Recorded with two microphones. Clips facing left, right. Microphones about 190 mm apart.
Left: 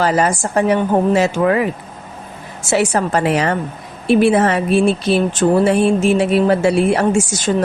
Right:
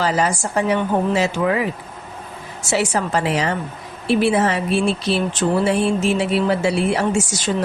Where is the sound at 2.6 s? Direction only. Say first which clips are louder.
Left 4 dB; 55° left (ahead or behind).